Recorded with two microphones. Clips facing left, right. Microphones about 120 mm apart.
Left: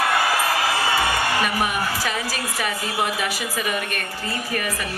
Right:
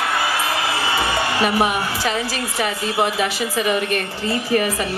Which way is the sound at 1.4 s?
25° right (ahead or behind).